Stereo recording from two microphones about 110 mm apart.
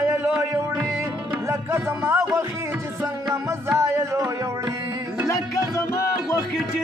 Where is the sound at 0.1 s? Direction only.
20° right (ahead or behind).